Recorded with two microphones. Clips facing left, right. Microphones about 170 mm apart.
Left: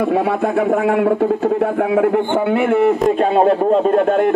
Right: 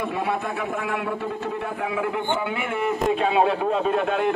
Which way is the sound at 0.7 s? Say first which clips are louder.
Left 12 dB; 50° left (ahead or behind).